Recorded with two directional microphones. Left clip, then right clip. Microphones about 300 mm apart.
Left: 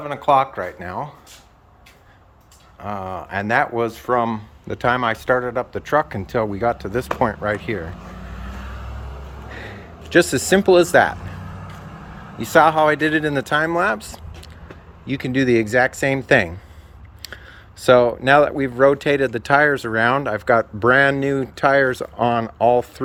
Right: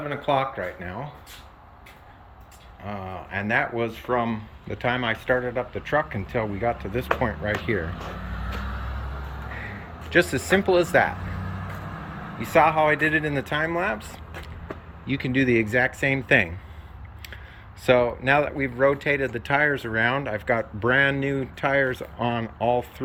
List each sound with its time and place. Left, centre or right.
0.0 s speech: centre
3.1 s speech: left
9.5 s speech: left
12.4 s speech: left